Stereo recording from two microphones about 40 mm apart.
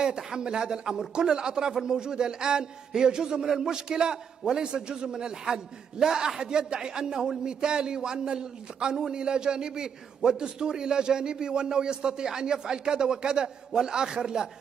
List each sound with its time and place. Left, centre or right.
0.0 s a man's voice: centre